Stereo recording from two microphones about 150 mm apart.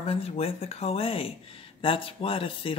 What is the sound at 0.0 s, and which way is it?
Speech, 40° left (ahead or behind).